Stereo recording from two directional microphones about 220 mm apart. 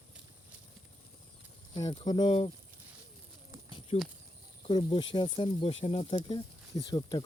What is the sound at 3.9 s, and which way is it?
Speech, 30° left (ahead or behind).